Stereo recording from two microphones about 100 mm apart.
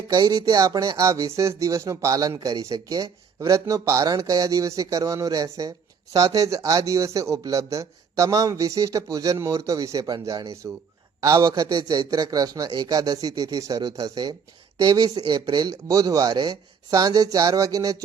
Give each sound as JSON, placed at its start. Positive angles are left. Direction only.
{"t": 0.1, "sound": "speech", "side_deg": -40}